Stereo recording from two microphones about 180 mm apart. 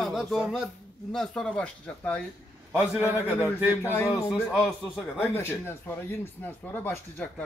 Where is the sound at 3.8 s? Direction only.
10° left (ahead or behind).